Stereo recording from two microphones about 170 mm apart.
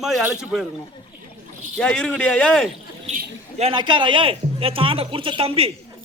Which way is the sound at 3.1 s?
40° right (ahead or behind).